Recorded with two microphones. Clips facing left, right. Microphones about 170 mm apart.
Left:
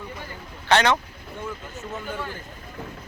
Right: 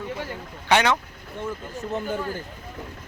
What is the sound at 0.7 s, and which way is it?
Speech, 10° right (ahead or behind).